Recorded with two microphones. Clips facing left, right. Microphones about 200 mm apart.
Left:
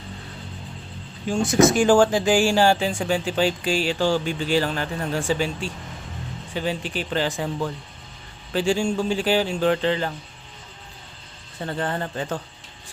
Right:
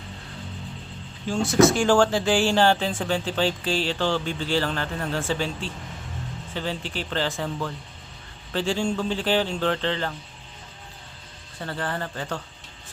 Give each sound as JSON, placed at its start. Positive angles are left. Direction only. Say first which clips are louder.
{"t": 1.5, "sound": "speech", "louder": "left 2 dB", "side_deg": 20}
{"t": 11.6, "sound": "a man's voice", "louder": "left 3 dB", "side_deg": 20}